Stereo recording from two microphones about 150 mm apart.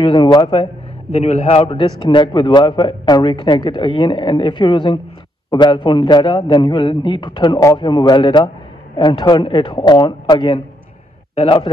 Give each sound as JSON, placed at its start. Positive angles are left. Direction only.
{"t": 0.0, "sound": "a man's voice", "side_deg": 30}
{"t": 1.1, "sound": "a man's voice", "side_deg": 45}